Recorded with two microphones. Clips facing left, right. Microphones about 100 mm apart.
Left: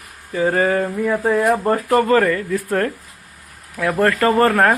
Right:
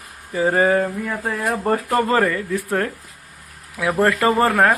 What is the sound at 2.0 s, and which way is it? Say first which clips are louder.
Speech: left 4 dB; 25° right (ahead or behind).